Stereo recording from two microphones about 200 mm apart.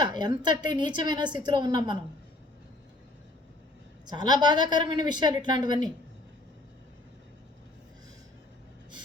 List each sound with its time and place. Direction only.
0.0 s a woman's voice: 20° right (ahead or behind)
4.0 s a woman's voice: 20° right (ahead or behind)